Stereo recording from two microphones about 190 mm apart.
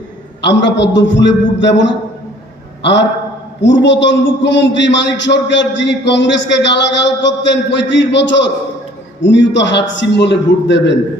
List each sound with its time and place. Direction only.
0.4 s a man's voice: 65° left (ahead or behind)